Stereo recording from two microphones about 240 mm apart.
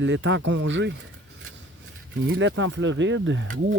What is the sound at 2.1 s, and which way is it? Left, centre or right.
Speech, right.